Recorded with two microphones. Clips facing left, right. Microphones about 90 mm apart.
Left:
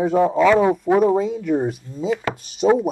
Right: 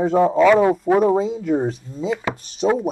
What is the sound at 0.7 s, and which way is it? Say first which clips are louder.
Speech: even; 10° left (ahead or behind).